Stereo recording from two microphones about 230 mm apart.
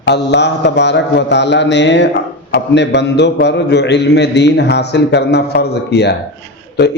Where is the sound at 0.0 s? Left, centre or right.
Left.